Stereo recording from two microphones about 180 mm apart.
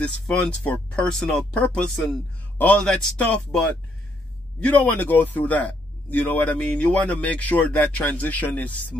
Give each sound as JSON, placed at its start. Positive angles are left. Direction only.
{"t": 0.0, "sound": "speech", "side_deg": 5}